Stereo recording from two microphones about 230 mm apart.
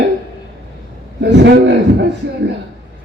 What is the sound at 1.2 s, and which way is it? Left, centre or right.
Speech, right.